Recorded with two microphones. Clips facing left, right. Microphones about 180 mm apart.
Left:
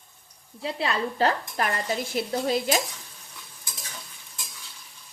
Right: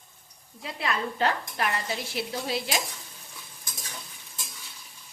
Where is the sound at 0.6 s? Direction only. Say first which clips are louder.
Left 3 dB; 30° left (ahead or behind).